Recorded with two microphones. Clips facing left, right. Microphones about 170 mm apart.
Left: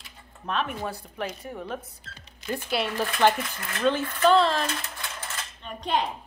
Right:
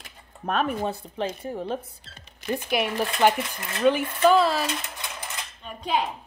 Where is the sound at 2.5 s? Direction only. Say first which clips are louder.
Right 3 dB; 15° right (ahead or behind).